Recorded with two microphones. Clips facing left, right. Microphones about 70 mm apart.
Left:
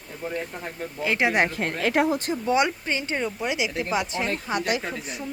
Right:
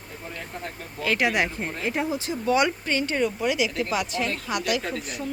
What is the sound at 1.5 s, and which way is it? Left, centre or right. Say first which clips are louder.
Speech: left 4 dB; left.